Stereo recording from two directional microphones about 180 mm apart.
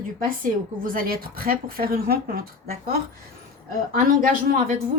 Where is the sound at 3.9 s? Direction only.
50° right (ahead or behind).